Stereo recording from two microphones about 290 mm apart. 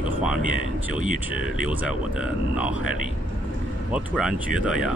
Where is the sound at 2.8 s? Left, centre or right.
Left.